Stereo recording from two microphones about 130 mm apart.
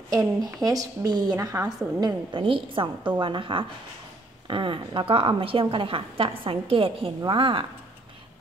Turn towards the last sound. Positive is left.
turn(degrees=-40)  # may be behind; listen again after turning